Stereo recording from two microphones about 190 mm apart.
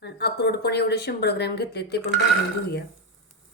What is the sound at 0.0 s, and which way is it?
Speech, 60° left (ahead or behind).